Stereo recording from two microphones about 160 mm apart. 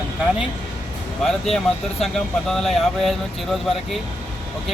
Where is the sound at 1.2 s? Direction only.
Centre (ahead or behind).